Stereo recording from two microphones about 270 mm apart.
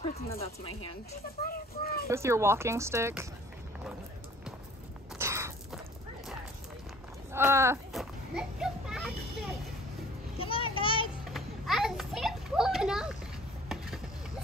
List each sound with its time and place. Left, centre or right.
0.0 s speech: left
1.4 s speech: left
2.0 s speech: centre
5.2 s a sound: centre
7.3 s children playing: centre
10.4 s child singing: centre
11.3 s children playing: centre
13.7 s a sound: centre